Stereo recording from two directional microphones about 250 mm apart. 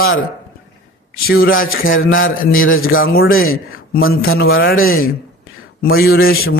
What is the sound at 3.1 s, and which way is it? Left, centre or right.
Speech, left.